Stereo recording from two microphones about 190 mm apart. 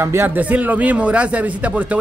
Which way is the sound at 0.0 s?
10° right (ahead or behind).